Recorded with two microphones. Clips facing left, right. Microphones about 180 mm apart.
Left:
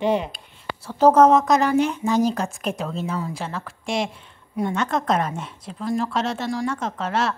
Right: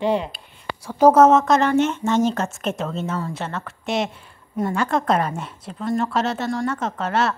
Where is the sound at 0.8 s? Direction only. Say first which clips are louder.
Right 1 dB; 10° right (ahead or behind).